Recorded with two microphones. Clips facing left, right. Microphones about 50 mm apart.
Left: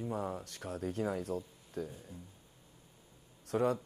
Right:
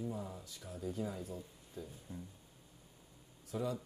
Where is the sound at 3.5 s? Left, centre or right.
Left.